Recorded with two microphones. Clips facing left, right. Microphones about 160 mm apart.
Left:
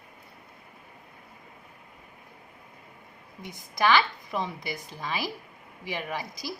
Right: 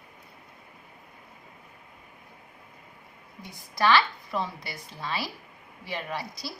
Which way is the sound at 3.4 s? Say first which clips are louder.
Even; 15° left (ahead or behind).